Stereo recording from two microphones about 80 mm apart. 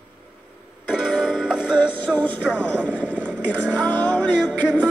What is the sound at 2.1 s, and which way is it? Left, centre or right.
Speech, centre.